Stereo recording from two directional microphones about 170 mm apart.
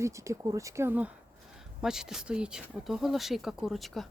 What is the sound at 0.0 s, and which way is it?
Speech, 15° right (ahead or behind).